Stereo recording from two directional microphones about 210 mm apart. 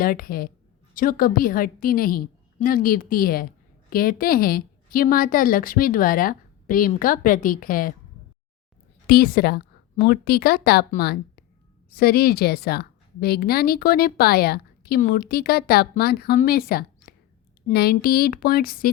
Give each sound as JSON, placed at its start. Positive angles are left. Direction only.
{"t": 0.0, "sound": "a woman's voice", "side_deg": 45}
{"t": 9.0, "sound": "a woman's voice", "side_deg": 45}